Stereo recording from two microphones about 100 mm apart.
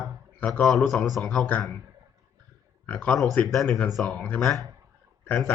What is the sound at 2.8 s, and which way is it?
Speech, 15° left (ahead or behind).